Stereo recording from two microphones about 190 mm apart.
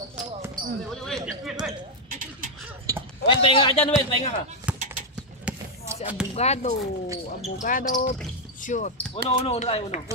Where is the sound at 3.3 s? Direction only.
25° left (ahead or behind).